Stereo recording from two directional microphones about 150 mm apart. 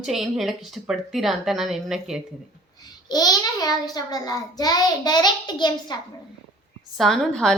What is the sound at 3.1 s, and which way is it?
A child's voice, 25° left (ahead or behind).